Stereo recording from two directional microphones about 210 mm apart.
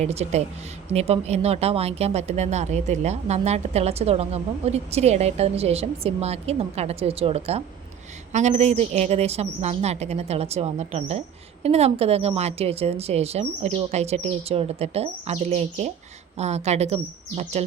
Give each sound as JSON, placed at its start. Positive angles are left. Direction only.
{"t": 0.0, "sound": "a woman's voice", "side_deg": -30}